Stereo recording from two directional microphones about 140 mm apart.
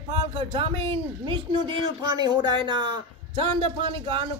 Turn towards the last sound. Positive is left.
turn(degrees=-40)  # may be behind; listen again after turning